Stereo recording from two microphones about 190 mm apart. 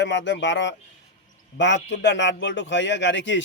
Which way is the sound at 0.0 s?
70° left (ahead or behind).